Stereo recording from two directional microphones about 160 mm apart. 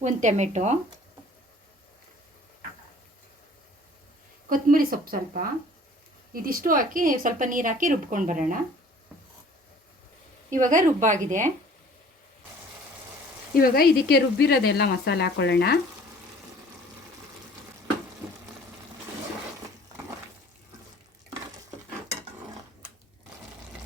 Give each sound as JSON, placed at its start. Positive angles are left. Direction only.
{"t": 0.0, "sound": "a woman's voice", "side_deg": -50}
{"t": 4.4, "sound": "speech", "side_deg": -60}
{"t": 10.5, "sound": "a woman's voice", "side_deg": -55}
{"t": 13.5, "sound": "speech", "side_deg": 70}